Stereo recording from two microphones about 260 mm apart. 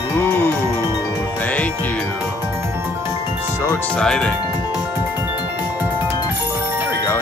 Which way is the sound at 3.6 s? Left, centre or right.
Centre.